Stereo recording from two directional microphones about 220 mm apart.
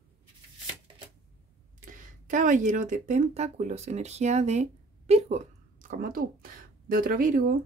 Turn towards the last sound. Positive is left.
turn(degrees=-40)  # may be behind; listen again after turning